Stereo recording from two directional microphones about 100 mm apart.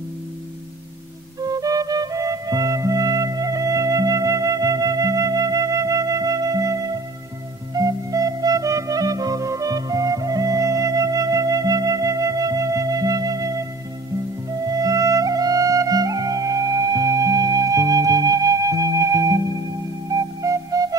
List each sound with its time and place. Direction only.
1.4 s music: 40° right (ahead or behind)